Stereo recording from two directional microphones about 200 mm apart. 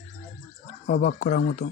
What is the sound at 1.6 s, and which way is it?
Speech, 55° left (ahead or behind).